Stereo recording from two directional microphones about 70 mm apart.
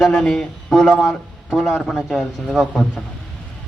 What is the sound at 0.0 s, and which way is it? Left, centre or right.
A man's voice, centre.